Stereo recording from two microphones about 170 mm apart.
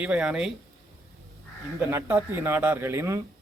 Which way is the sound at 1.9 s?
15° right (ahead or behind).